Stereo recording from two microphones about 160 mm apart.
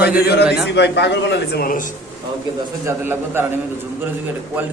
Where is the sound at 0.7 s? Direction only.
90° left; by 1.8 s 65° left (ahead or behind).